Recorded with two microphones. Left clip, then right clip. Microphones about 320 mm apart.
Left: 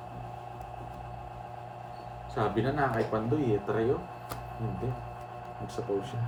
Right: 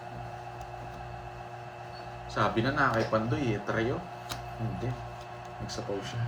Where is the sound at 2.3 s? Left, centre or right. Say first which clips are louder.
Right 2 dB; right.